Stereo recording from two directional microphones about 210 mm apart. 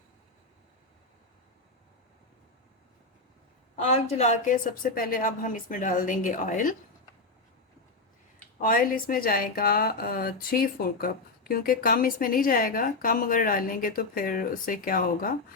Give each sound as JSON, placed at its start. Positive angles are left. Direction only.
{"t": 3.8, "sound": "a woman's voice", "side_deg": 30}
{"t": 8.6, "sound": "a woman's voice", "side_deg": 40}